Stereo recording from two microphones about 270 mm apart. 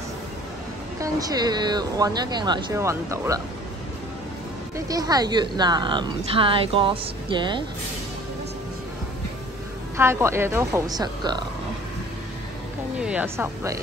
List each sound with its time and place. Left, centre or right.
1.0 s a woman's voice: centre
4.7 s a woman's voice: centre
9.9 s a woman's voice: centre
13.0 s a woman's voice: centre